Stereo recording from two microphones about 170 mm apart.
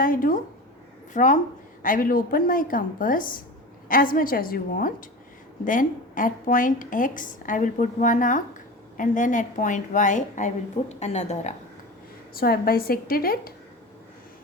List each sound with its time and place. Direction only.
0.0 s a woman's voice: 55° left (ahead or behind)
12.3 s a woman's voice: 60° left (ahead or behind)